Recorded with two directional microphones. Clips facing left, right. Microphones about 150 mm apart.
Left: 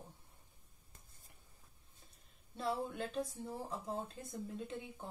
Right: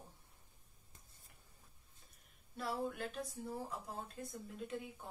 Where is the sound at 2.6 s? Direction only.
25° left (ahead or behind).